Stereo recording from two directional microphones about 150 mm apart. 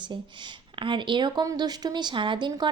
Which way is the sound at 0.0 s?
30° right (ahead or behind).